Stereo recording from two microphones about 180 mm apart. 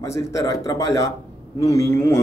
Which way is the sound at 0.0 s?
15° left (ahead or behind).